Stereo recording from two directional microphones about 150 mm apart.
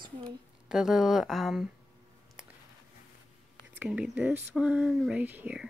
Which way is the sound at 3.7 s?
5° right (ahead or behind).